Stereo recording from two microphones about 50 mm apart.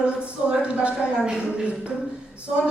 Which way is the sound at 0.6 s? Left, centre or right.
Right.